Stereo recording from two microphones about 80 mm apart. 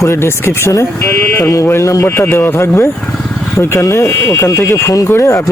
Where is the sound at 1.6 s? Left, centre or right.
Left.